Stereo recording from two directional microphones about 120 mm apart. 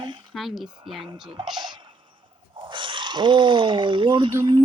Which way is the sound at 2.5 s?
45° right (ahead or behind).